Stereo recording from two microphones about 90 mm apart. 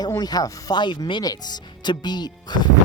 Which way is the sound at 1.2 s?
45° left (ahead or behind).